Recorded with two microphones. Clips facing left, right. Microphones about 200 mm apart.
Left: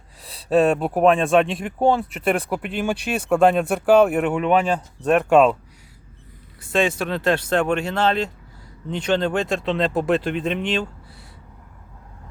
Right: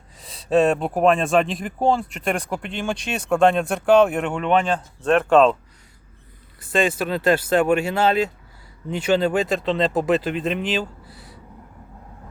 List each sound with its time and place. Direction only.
0.2 s speech: centre (ahead or behind)
6.6 s speech: centre (ahead or behind)